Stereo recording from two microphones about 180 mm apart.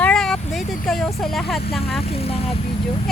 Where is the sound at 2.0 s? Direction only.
35° left (ahead or behind).